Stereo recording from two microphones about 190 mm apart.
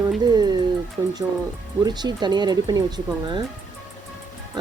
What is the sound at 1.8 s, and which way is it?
Speech, 20° right (ahead or behind).